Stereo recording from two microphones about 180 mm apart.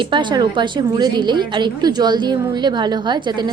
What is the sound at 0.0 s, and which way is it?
A woman's voice, 25° right (ahead or behind).